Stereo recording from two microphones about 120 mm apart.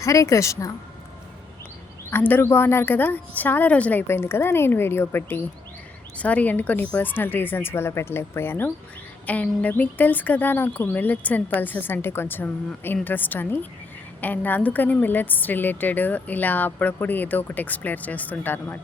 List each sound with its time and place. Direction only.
0.0 s speech: 25° left (ahead or behind)
2.0 s a woman's voice: 15° left (ahead or behind)